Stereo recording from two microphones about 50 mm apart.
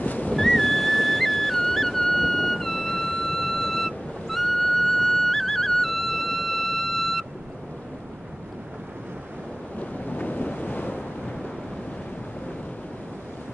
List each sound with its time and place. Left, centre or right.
0.0 s a sound: left
0.4 s music: centre
9.8 s waves: left